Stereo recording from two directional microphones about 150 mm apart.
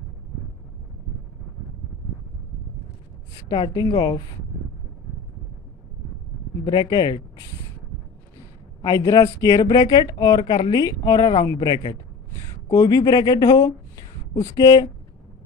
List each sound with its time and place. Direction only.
3.3 s speech: 30° left (ahead or behind)
6.6 s speech: 25° left (ahead or behind)
8.8 s speech: 25° left (ahead or behind)